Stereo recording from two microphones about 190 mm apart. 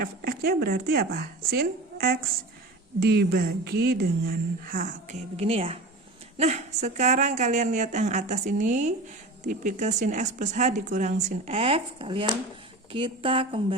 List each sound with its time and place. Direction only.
0.0 s speech: 50° right (ahead or behind)
5.4 s speech: 30° right (ahead or behind)